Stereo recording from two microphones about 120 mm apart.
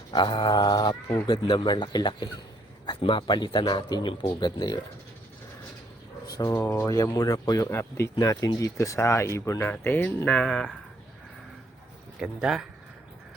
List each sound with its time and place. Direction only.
0.1 s a man's voice: 40° left (ahead or behind)
4.1 s a man's voice: 50° left (ahead or behind)
4.4 s speech: 35° left (ahead or behind)
6.3 s speech: 25° left (ahead or behind); by 10.8 s 5° left (ahead or behind)
12.2 s speech: 5° right (ahead or behind)